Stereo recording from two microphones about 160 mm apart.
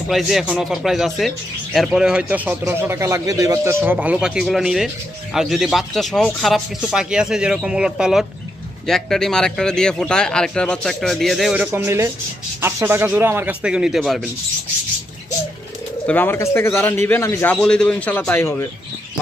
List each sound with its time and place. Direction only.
0.1 s speech: centre (ahead or behind)
11.5 s speech: 10° right (ahead or behind)
16.1 s a man's voice: 10° left (ahead or behind)